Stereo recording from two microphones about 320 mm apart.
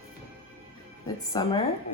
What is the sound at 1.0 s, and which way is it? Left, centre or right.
Speech, centre.